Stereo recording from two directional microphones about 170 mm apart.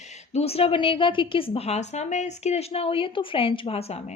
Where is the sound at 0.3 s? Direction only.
35° left (ahead or behind).